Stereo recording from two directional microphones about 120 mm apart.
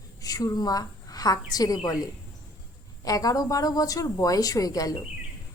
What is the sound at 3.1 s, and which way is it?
A woman's voice, 30° left (ahead or behind).